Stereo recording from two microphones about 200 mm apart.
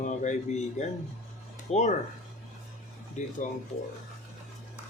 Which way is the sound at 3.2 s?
35° left (ahead or behind).